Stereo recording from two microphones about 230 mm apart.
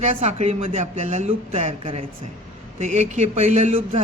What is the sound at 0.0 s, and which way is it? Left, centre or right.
A man's voice, right.